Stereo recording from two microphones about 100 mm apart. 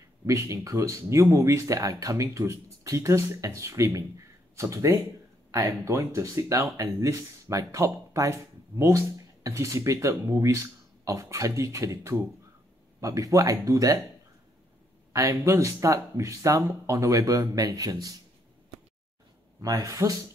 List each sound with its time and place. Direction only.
0.3 s speech: 30° right (ahead or behind)
15.1 s speech: 30° right (ahead or behind)
19.6 s speech: 35° right (ahead or behind)